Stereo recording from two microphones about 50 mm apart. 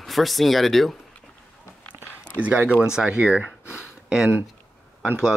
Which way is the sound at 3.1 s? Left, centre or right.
Right.